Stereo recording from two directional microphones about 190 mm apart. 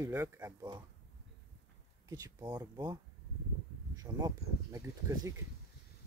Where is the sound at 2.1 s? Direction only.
20° right (ahead or behind).